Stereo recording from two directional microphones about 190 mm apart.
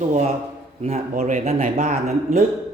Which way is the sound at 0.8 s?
35° right (ahead or behind).